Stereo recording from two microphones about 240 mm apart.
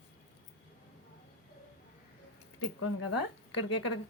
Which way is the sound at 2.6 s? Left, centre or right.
Left.